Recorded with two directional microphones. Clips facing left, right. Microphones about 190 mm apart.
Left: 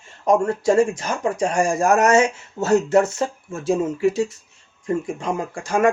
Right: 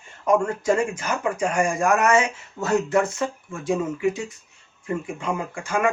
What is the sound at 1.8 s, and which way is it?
Speech, 40° left (ahead or behind).